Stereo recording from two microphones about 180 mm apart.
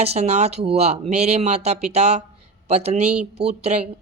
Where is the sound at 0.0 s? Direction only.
35° right (ahead or behind).